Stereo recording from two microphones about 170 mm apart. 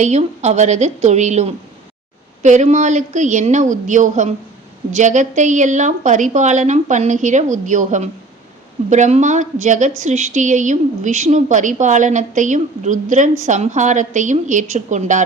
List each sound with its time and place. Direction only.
0.0 s a woman's voice: 40° right (ahead or behind)